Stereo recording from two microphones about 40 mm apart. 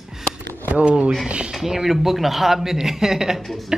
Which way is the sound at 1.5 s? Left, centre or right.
Centre.